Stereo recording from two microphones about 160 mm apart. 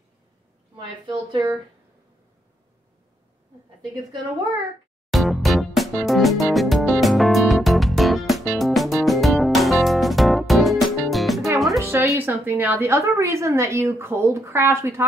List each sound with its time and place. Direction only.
0.7 s a woman's voice: 30° right (ahead or behind)
5.1 s music: centre (ahead or behind)
11.8 s music: 15° right (ahead or behind)
12.2 s a woman's voice: 15° right (ahead or behind)